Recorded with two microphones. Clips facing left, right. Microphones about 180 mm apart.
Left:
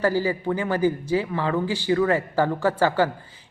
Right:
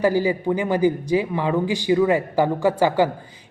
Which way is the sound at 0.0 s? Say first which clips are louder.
Right 3 dB; 15° right (ahead or behind).